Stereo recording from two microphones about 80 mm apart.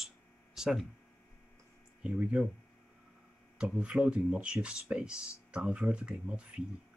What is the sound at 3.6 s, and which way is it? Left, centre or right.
Speech, centre.